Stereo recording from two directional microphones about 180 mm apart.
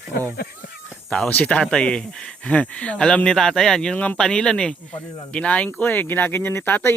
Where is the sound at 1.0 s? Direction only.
5° left (ahead or behind).